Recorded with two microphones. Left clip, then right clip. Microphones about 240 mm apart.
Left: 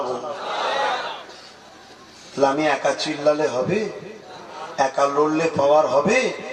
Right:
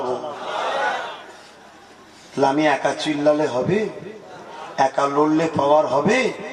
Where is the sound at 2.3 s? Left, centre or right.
Right.